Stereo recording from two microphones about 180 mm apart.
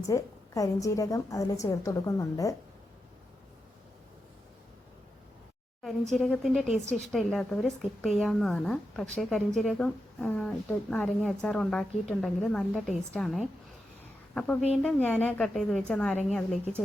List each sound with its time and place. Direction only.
0.1 s a woman's voice: 20° left (ahead or behind)
5.8 s a woman's voice: centre (ahead or behind)